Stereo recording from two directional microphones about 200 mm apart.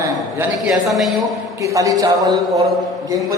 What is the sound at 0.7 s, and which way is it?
Speech, centre (ahead or behind).